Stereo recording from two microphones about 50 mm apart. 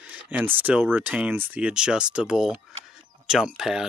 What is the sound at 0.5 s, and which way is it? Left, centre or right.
Speech, right.